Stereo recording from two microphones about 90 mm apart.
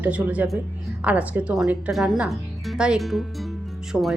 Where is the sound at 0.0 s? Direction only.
15° right (ahead or behind).